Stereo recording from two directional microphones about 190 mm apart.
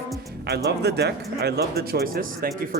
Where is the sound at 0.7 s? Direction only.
60° right (ahead or behind).